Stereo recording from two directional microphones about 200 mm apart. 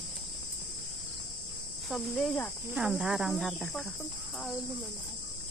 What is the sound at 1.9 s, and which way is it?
Speech, 5° left (ahead or behind).